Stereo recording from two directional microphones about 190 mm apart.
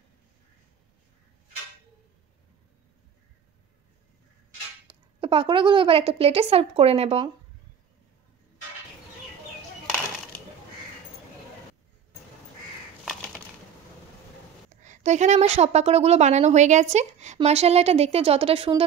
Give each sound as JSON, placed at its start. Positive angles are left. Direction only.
{"t": 4.8, "sound": "a woman's voice", "side_deg": -30}
{"t": 13.0, "sound": "a sound", "side_deg": 0}
{"t": 14.8, "sound": "a woman's voice", "side_deg": -40}